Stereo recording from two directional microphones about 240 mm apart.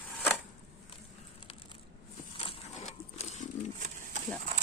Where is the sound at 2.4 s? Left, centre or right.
Left.